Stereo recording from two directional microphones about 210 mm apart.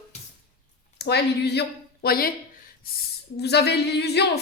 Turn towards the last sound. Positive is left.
turn(degrees=50)  # may be behind; listen again after turning